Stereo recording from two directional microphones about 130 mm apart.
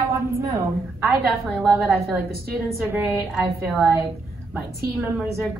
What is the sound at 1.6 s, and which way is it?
Speech, 15° right (ahead or behind).